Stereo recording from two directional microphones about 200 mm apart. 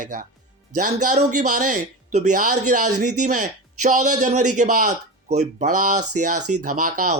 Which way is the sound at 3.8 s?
40° right (ahead or behind).